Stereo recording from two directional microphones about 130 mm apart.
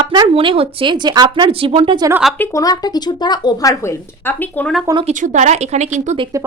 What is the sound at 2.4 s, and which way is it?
Speech, 25° left (ahead or behind).